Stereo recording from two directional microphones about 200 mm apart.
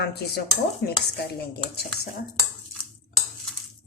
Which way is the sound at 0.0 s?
55° left (ahead or behind).